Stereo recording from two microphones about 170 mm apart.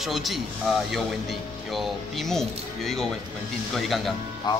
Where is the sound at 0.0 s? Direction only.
Centre (ahead or behind).